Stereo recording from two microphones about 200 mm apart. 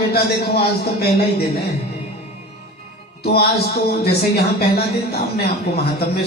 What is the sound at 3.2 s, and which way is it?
Speech, 50° left (ahead or behind).